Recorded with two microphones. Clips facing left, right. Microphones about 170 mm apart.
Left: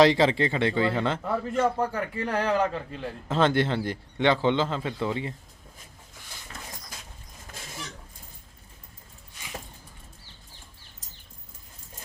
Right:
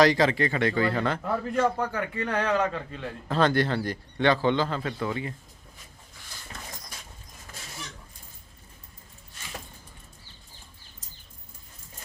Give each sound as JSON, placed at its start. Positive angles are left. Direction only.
{"t": 0.0, "sound": "a man's voice", "side_deg": 25}
{"t": 1.2, "sound": "a man's voice", "side_deg": 5}
{"t": 1.8, "sound": "a man's voice", "side_deg": 30}